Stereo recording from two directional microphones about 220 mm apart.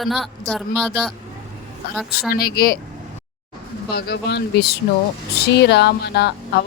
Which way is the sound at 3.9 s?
50° left (ahead or behind).